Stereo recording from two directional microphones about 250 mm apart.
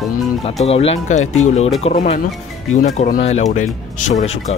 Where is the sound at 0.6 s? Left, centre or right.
Left.